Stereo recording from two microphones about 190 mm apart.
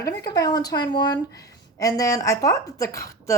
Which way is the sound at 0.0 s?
20° left (ahead or behind).